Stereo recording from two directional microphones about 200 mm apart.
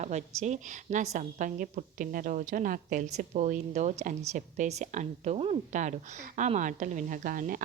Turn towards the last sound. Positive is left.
turn(degrees=-45)  # may be behind; listen again after turning